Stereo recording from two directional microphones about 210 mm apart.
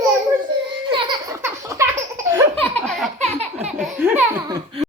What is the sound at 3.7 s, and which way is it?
A child's voice, 5° right (ahead or behind).